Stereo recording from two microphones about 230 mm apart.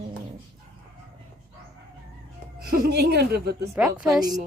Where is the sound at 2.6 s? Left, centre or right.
Right.